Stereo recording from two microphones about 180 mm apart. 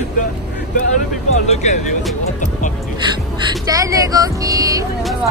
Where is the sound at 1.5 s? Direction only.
40° left (ahead or behind).